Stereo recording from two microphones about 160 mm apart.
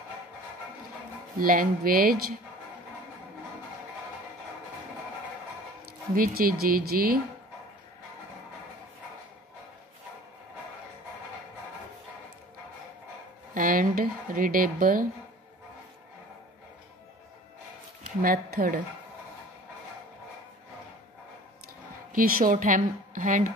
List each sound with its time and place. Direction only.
1.4 s a woman's voice: 60° right (ahead or behind)
6.1 s a woman's voice: 65° right (ahead or behind)
13.6 s speech: 60° right (ahead or behind)
18.2 s a woman's voice: 65° right (ahead or behind)
22.1 s a woman's voice: 60° right (ahead or behind)